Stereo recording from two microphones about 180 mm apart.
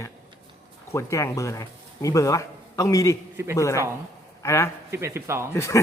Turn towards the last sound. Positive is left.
turn(degrees=15)  # may be behind; listen again after turning